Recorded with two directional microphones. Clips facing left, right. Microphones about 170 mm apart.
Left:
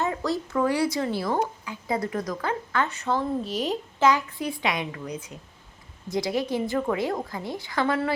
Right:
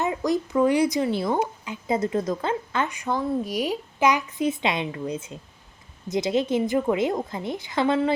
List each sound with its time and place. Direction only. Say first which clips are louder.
0.0 s a woman's voice: right 3 dB; 15° right (ahead or behind)